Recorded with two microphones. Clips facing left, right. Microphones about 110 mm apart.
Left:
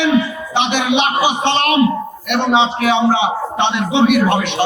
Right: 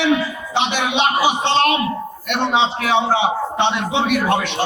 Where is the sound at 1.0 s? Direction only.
20° left (ahead or behind).